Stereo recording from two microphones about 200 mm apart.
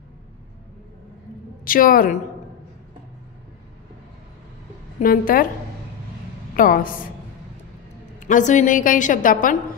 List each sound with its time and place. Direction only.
1.6 s a woman's voice: 45° left (ahead or behind)
5.0 s a woman's voice: 45° left (ahead or behind)
6.5 s a woman's voice: 45° left (ahead or behind)
8.2 s a woman's voice: 40° left (ahead or behind)